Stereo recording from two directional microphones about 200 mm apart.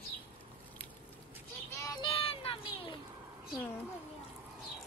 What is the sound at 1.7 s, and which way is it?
Music, 25° left (ahead or behind).